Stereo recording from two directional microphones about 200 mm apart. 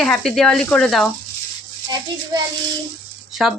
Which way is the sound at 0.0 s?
Centre (ahead or behind).